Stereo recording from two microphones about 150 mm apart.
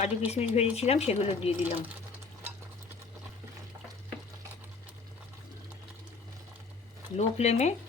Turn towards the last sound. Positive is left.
turn(degrees=50)  # may be behind; listen again after turning